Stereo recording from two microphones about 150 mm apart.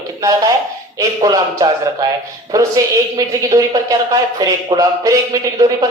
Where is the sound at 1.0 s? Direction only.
25° right (ahead or behind).